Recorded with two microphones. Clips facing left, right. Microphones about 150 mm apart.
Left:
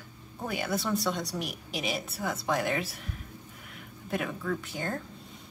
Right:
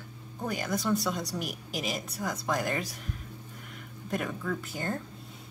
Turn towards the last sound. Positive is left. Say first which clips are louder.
# even
turn(degrees=0)  # may be behind; listen again after turning